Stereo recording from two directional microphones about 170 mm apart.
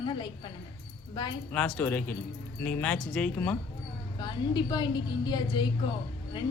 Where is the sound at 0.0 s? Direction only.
30° left (ahead or behind).